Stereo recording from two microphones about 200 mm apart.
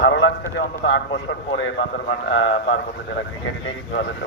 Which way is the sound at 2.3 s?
70° left (ahead or behind).